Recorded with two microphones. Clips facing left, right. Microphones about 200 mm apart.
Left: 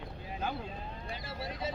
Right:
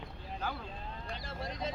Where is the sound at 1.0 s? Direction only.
5° left (ahead or behind).